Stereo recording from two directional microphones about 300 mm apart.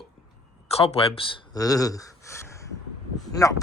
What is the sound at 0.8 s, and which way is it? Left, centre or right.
Speech, centre.